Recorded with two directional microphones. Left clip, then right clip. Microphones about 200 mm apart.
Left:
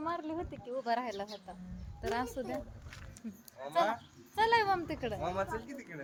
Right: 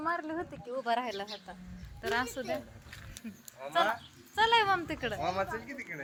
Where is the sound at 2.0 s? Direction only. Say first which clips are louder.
Right 3 dB; 10° left (ahead or behind).